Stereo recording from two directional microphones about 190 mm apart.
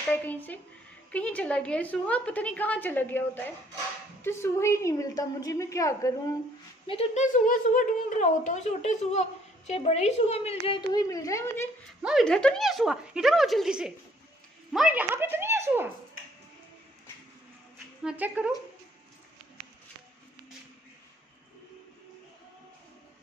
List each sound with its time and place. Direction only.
0.1 s a woman's voice: 10° left (ahead or behind)
6.9 s a woman's voice: 35° left (ahead or behind)
10.9 s a woman's voice: 20° left (ahead or behind)
12.0 s speech: centre (ahead or behind)
14.7 s a sound: 5° right (ahead or behind)
18.0 s speech: 5° right (ahead or behind)